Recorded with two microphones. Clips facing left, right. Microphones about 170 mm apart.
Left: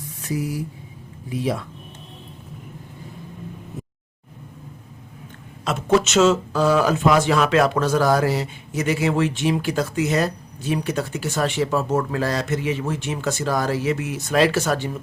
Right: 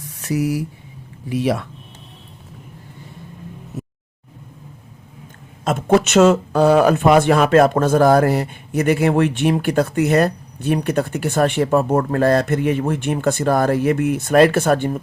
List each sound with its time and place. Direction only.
0.2 s speech: 75° right (ahead or behind)
5.6 s speech: 60° right (ahead or behind)